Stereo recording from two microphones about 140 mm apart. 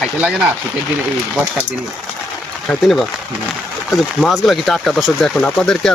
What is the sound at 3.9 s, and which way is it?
Speech, centre (ahead or behind).